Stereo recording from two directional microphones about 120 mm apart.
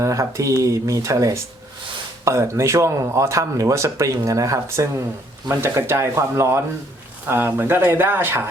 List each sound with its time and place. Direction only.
0.0 s speech: 25° right (ahead or behind)